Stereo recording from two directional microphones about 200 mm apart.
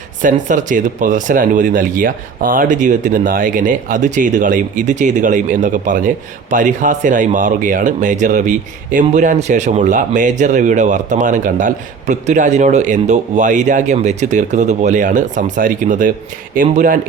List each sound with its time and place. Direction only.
0.2 s speech: 40° right (ahead or behind)